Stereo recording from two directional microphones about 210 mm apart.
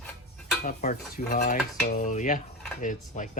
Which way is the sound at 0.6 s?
40° left (ahead or behind).